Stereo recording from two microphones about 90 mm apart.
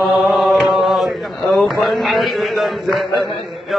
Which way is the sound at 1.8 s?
Centre (ahead or behind).